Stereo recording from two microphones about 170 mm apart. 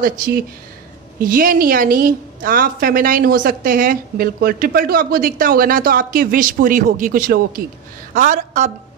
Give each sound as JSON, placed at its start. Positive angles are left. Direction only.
{"t": 0.0, "sound": "a woman's voice", "side_deg": -55}